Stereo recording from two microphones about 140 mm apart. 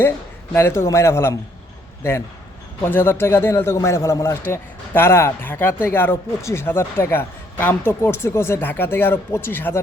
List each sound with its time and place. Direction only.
0.5 s a man's voice: 20° left (ahead or behind)
2.8 s a man's voice: 15° left (ahead or behind)